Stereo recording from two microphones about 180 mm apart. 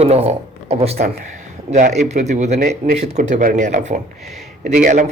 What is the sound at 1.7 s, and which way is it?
Speech, 55° right (ahead or behind).